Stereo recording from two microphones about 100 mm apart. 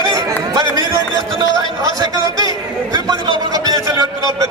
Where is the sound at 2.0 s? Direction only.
40° right (ahead or behind).